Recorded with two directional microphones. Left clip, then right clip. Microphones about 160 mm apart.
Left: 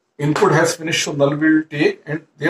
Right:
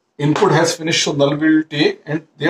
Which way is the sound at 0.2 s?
35° right (ahead or behind).